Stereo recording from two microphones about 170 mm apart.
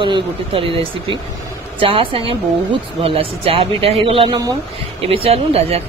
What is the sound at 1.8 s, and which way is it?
Speech, 30° right (ahead or behind).